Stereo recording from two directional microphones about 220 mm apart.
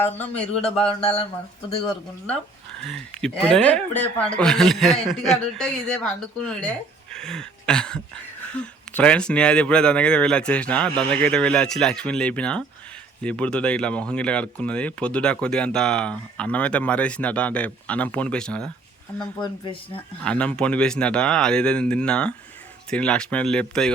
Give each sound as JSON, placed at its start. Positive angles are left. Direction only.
{"t": 0.6, "sound": "speech", "side_deg": 25}
{"t": 2.8, "sound": "speech", "side_deg": 5}
{"t": 19.4, "sound": "speech", "side_deg": 20}
{"t": 20.2, "sound": "speech", "side_deg": 5}